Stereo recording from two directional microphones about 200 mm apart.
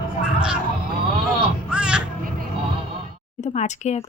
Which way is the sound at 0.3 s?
5° right (ahead or behind).